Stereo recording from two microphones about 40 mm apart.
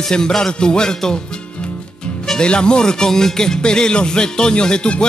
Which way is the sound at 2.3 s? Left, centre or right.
Left.